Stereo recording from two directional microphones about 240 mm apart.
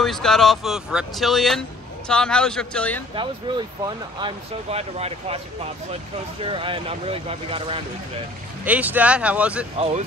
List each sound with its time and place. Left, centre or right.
0.0 s speech: centre
3.2 s speech: centre
6.4 s speech: right
8.6 s speech: centre